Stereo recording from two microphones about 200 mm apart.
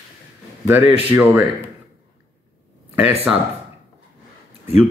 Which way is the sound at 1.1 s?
10° right (ahead or behind).